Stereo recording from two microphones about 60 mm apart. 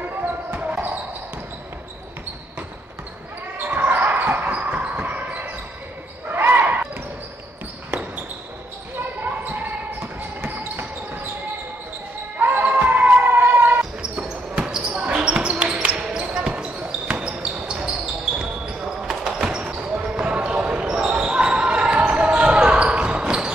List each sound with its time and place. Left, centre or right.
0.1 s basketball bounce: right
3.5 s basketball bounce: right
9.2 s basketball bounce: right
12.4 s basketball bounce: right
13.7 s basketball bounce: centre
19.4 s basketball bounce: centre